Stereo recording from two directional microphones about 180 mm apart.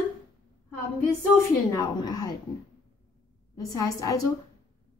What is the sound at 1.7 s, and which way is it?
Speech, 20° left (ahead or behind).